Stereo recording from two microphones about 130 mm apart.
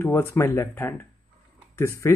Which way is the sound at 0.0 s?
20° left (ahead or behind).